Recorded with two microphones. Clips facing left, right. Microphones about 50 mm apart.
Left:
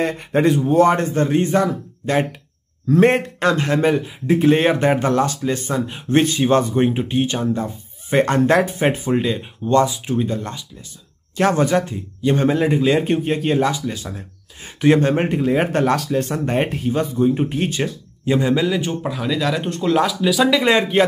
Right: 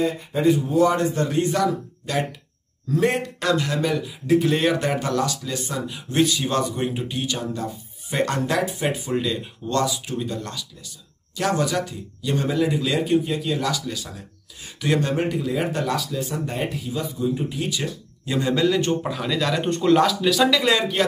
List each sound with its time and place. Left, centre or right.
0.0 s speech: left
0.7 s a man's voice: left
13.7 s speech: left
18.2 s speech: left
18.5 s speech: centre
20.5 s speech: left